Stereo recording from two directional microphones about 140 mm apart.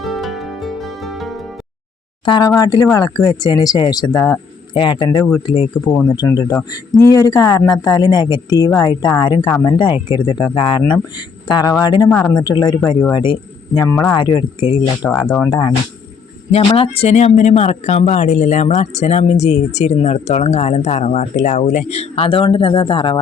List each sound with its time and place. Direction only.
0.0 s music: centre (ahead or behind)
2.2 s speech: 35° left (ahead or behind)
5.7 s speech: 10° left (ahead or behind)
6.1 s speech: 25° left (ahead or behind)
12.0 s speech: 15° left (ahead or behind)
12.4 s speech: 30° left (ahead or behind)
13.7 s speech: 20° left (ahead or behind)
14.1 s speech: 30° left (ahead or behind)
16.5 s speech: 45° left (ahead or behind)